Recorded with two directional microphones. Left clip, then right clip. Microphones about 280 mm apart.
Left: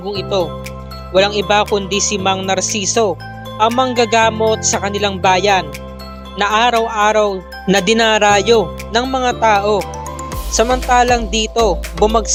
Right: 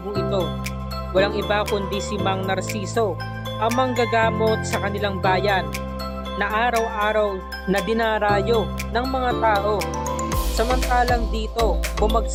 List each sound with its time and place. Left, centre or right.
0.2 s music: centre
7.9 s speech: left
10.8 s speech: left